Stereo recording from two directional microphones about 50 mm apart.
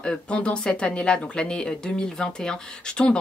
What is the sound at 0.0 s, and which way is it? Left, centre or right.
Speech, left.